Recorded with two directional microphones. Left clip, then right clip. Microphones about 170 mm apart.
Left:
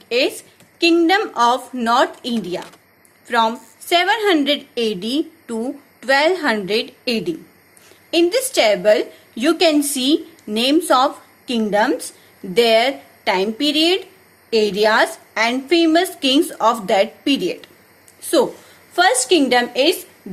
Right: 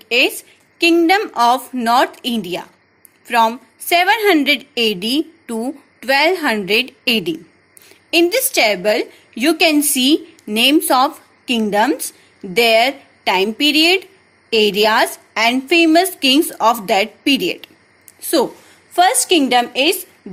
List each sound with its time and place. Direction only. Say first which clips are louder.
0.1 s a woman's voice: right 3 dB; 40° right (ahead or behind)